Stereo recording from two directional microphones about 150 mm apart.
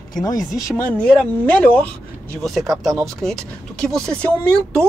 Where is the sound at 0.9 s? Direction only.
5° left (ahead or behind).